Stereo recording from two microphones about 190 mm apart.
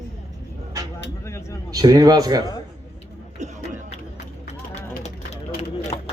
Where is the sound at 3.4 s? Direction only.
40° right (ahead or behind).